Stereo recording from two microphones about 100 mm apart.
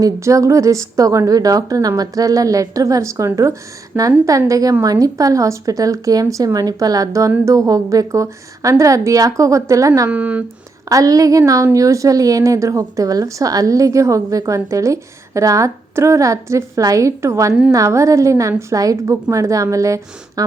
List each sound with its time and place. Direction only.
0.0 s a woman's voice: 30° right (ahead or behind)
3.9 s speech: 15° right (ahead or behind)
4.3 s a woman's voice: 35° right (ahead or behind)
10.1 s speech: 15° right (ahead or behind)
10.8 s a woman's voice: 35° right (ahead or behind)